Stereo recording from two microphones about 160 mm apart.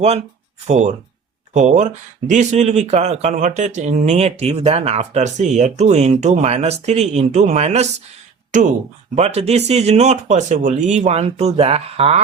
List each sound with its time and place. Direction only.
0.7 s speech: 45° right (ahead or behind)